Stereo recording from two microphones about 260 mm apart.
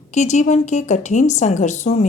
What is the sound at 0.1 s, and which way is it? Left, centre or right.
A woman's voice, left.